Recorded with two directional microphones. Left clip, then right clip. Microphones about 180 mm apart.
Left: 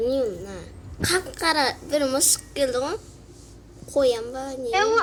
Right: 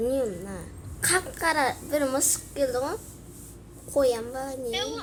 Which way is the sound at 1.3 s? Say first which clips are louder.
Left 3 dB; 20° left (ahead or behind).